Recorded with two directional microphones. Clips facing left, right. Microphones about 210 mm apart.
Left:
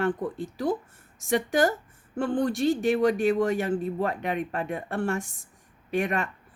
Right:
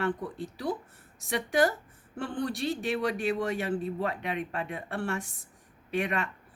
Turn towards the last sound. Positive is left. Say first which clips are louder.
# left 3 dB
turn(degrees=45)  # may be behind; listen again after turning